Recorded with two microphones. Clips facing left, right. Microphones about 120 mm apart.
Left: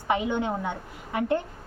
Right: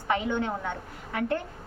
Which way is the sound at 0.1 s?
15° left (ahead or behind).